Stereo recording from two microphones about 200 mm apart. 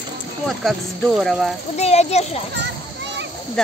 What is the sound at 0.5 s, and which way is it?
Speech, centre (ahead or behind).